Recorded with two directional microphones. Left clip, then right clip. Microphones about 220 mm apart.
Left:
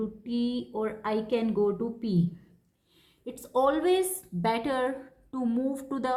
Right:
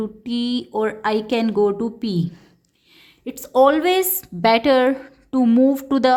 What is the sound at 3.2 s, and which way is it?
A woman's voice, 40° right (ahead or behind).